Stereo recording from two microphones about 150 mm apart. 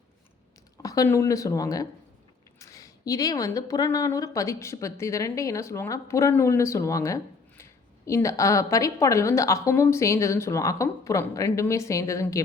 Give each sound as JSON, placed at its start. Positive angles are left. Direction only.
{"t": 0.8, "sound": "a woman's voice", "side_deg": 25}